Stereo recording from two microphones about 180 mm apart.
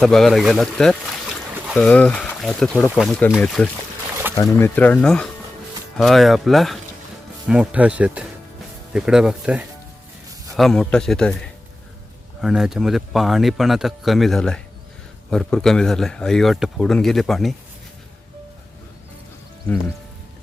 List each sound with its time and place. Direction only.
0.0 s speech: centre (ahead or behind)